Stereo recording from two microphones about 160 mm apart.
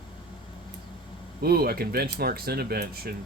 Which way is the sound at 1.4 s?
75° right (ahead or behind).